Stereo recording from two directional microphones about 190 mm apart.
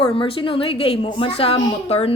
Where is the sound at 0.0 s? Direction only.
30° left (ahead or behind).